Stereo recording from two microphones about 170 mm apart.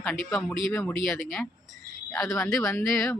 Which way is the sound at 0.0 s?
5° left (ahead or behind).